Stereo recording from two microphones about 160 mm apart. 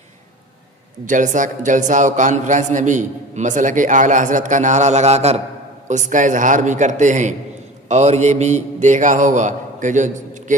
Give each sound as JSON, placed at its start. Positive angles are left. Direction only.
{"t": 1.0, "sound": "a man's voice", "side_deg": -55}